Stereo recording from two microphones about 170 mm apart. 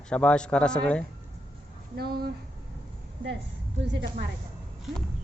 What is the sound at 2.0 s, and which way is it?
Speech, 65° right (ahead or behind).